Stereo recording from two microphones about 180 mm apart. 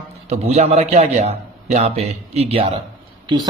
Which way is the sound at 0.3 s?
35° right (ahead or behind).